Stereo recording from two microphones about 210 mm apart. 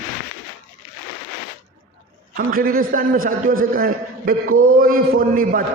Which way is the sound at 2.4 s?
45° right (ahead or behind).